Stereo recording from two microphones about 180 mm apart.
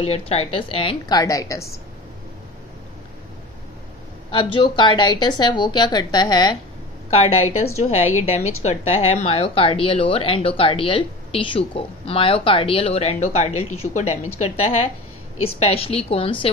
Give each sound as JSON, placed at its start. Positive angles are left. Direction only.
{"t": 0.3, "sound": "speech", "side_deg": 30}
{"t": 4.3, "sound": "speech", "side_deg": 30}
{"t": 7.6, "sound": "speech", "side_deg": 35}